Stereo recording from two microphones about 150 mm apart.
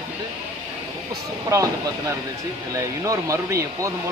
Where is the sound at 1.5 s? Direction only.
20° right (ahead or behind).